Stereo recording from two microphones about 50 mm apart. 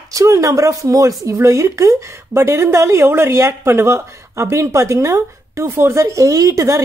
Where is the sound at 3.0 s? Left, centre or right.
Right.